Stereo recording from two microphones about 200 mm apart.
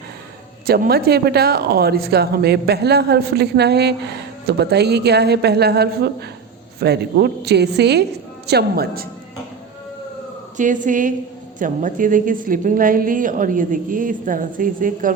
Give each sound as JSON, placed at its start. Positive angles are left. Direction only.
{"t": 0.7, "sound": "a woman's voice", "side_deg": -50}
{"t": 10.6, "sound": "a woman's voice", "side_deg": -40}